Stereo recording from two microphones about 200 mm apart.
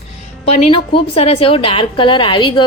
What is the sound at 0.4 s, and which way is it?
A woman's voice, 30° left (ahead or behind).